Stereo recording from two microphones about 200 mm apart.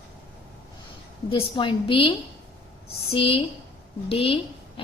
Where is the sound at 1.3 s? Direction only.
25° left (ahead or behind).